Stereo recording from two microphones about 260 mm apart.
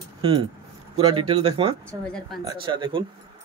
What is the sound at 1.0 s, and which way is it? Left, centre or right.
Speech, right.